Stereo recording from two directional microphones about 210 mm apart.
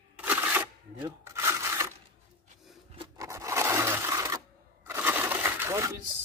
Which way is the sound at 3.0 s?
15° right (ahead or behind).